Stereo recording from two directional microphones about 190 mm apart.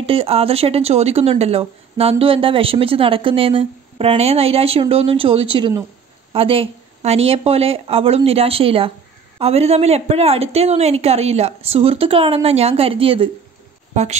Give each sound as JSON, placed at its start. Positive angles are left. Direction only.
{"t": 0.0, "sound": "a woman's voice", "side_deg": -30}